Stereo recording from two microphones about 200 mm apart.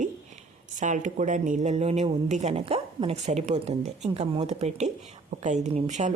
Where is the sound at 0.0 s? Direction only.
40° right (ahead or behind).